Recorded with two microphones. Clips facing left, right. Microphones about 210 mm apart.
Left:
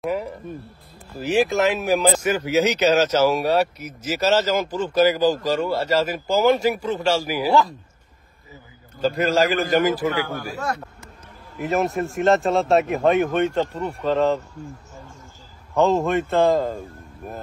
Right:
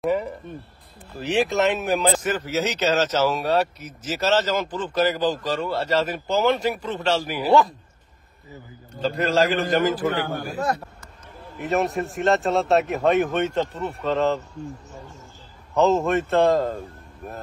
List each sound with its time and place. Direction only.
0.0 s speech: centre (ahead or behind)
9.0 s speech: 5° left (ahead or behind)
10.2 s speech: 50° right (ahead or behind)
11.5 s speech: centre (ahead or behind)
15.7 s speech: centre (ahead or behind)